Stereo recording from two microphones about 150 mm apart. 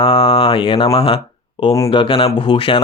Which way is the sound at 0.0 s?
40° left (ahead or behind).